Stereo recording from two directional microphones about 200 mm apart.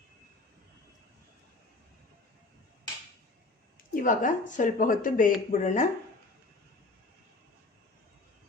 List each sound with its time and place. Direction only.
3.9 s speech: 40° left (ahead or behind)